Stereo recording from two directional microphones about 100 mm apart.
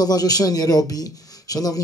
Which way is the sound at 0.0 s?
40° left (ahead or behind).